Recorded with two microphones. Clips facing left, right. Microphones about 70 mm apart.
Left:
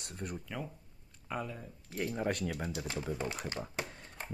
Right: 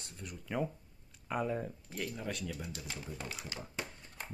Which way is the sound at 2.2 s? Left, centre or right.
Left.